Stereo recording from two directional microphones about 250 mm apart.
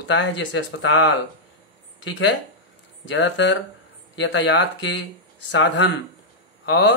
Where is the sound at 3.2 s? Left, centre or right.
Left.